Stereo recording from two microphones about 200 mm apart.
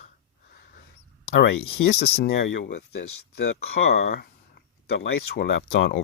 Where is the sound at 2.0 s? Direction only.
50° left (ahead or behind).